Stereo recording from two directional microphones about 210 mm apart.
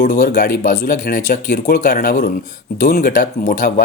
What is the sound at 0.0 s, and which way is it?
Speech, 40° left (ahead or behind).